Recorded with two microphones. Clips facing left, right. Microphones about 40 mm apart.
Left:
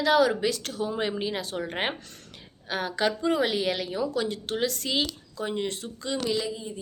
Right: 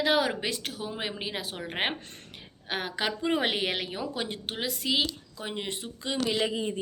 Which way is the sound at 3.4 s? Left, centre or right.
Right.